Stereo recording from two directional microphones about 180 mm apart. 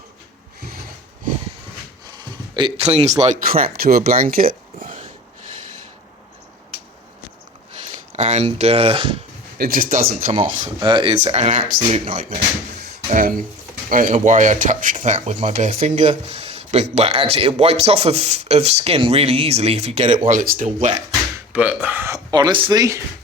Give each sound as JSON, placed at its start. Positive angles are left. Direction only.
{"t": 2.0, "sound": "a sound", "side_deg": -25}
{"t": 3.5, "sound": "speech", "side_deg": -55}
{"t": 8.1, "sound": "speech", "side_deg": -40}
{"t": 9.6, "sound": "speech", "side_deg": -55}
{"t": 10.6, "sound": "speech", "side_deg": -25}
{"t": 11.2, "sound": "speech", "side_deg": -40}
{"t": 13.1, "sound": "speech", "side_deg": -50}
{"t": 20.2, "sound": "speech", "side_deg": -45}
{"t": 21.5, "sound": "speech", "side_deg": -10}